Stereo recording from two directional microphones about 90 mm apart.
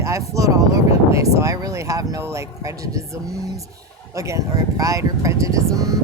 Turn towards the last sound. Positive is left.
turn(degrees=-40)  # may be behind; listen again after turning